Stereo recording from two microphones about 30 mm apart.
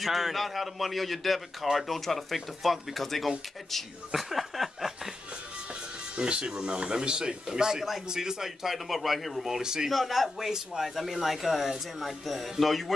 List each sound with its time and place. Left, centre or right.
0.0 s speech: centre
4.1 s chuckle: centre
6.1 s speech: right
8.6 s speech: centre
9.6 s speech: right
9.8 s speech: centre